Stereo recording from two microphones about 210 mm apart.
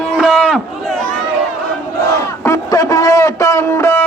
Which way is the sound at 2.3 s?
15° left (ahead or behind).